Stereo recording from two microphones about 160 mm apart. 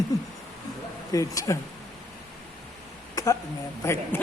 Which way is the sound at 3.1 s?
20° left (ahead or behind).